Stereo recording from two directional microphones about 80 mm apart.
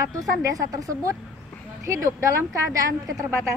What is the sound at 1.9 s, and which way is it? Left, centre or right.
A woman's voice, right.